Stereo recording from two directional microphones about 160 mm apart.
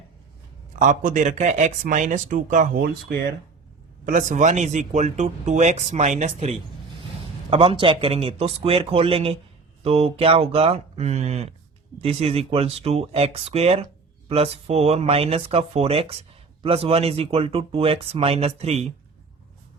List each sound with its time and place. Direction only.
0.9 s speech: 50° right (ahead or behind)
4.0 s speech: 55° right (ahead or behind)